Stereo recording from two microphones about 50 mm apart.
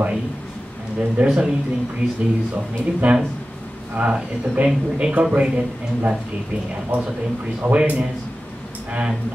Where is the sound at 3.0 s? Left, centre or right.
Right.